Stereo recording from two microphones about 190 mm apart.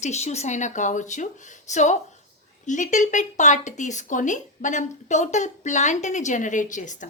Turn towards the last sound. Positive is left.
turn(degrees=40)  # may be behind; listen again after turning